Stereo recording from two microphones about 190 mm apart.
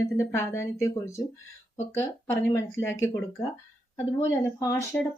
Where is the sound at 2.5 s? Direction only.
15° left (ahead or behind).